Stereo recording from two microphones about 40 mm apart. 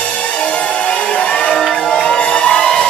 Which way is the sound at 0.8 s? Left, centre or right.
Left.